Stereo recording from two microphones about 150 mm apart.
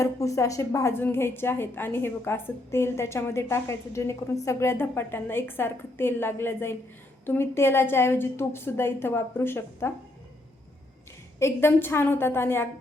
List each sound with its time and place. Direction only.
0.0 s a woman's voice: 20° left (ahead or behind)
11.3 s a woman's voice: 15° left (ahead or behind)